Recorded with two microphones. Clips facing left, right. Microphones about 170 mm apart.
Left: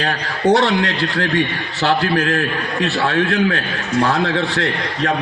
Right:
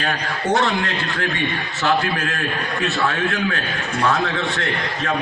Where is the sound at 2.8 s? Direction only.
35° left (ahead or behind).